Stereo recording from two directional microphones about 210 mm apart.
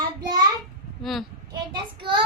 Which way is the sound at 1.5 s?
20° right (ahead or behind).